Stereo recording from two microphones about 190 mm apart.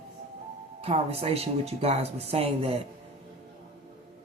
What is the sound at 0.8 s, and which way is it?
Speech, 30° right (ahead or behind).